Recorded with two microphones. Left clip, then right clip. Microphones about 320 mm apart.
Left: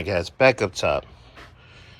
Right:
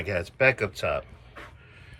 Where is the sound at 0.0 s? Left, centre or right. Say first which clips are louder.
Left 5 dB; centre.